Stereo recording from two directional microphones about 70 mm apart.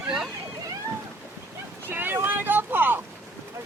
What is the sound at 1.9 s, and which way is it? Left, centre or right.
Vehicle, right.